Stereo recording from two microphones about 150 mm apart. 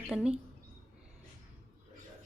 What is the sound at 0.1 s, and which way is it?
Speech, 5° right (ahead or behind).